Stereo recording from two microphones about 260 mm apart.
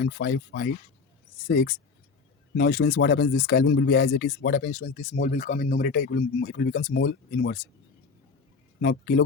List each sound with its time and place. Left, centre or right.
0.0 s speech: left
8.8 s speech: left